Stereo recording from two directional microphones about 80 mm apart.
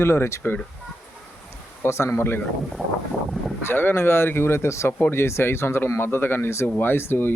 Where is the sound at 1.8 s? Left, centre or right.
Left.